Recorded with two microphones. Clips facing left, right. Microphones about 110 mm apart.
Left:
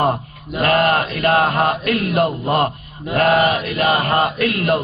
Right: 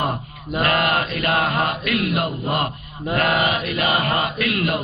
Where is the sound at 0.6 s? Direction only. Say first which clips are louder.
Left 4 dB; 40° left (ahead or behind).